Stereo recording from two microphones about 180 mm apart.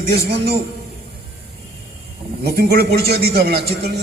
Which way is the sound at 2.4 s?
60° right (ahead or behind).